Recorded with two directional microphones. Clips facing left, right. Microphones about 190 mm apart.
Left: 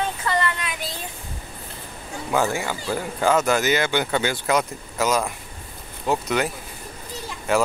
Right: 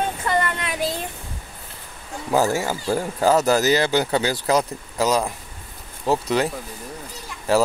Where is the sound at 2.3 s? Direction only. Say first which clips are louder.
Right 3 dB; 40° right (ahead or behind).